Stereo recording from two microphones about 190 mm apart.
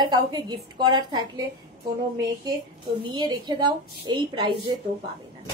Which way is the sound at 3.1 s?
20° right (ahead or behind).